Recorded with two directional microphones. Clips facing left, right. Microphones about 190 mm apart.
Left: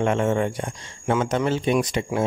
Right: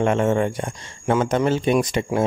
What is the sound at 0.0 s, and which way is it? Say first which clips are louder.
Speech: right 2 dB; 50° right (ahead or behind).